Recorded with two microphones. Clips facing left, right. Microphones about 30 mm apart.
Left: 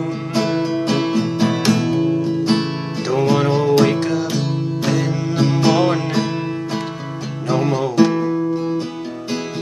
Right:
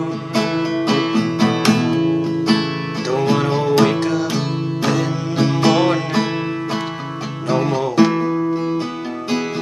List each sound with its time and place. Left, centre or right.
0.3 s music: centre
3.1 s music: centre
7.4 s music: centre
7.9 s music: centre